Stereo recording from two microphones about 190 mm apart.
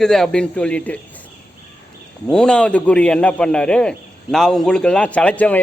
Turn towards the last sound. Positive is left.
turn(degrees=10)  # may be behind; listen again after turning